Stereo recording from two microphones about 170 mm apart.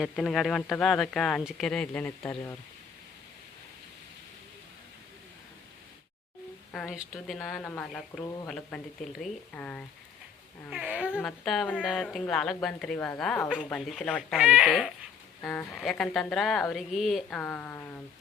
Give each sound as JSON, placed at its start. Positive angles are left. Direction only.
{"t": 0.0, "sound": "speech", "side_deg": 0}
{"t": 6.7, "sound": "speech", "side_deg": -5}
{"t": 10.7, "sound": "speech", "side_deg": -5}